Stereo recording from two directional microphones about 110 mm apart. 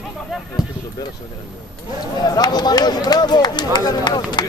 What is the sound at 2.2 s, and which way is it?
Speech, 35° left (ahead or behind).